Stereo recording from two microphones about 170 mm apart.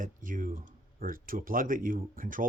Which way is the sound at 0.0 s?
50° right (ahead or behind).